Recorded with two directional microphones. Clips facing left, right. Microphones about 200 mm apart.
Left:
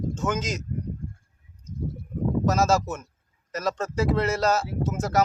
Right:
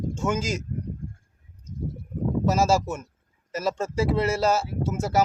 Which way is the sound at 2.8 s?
10° right (ahead or behind).